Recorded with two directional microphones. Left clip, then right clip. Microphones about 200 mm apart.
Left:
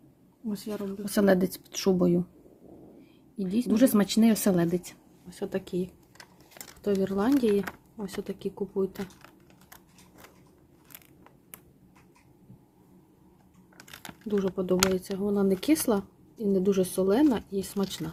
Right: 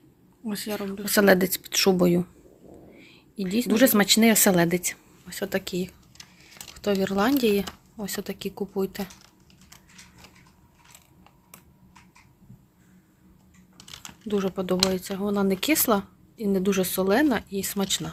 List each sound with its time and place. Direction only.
0.4 s a woman's voice: centre (ahead or behind)
14.3 s speech: 5° left (ahead or behind)